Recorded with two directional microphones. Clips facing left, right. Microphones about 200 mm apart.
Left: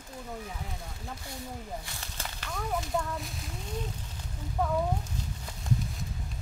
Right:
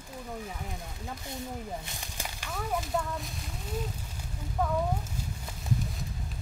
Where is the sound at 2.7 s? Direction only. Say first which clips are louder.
Even; centre (ahead or behind).